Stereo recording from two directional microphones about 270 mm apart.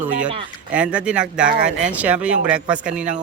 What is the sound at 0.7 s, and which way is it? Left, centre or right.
A man's voice, centre.